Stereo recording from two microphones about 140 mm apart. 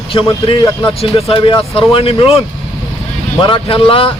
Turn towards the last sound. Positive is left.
turn(degrees=40)  # may be behind; listen again after turning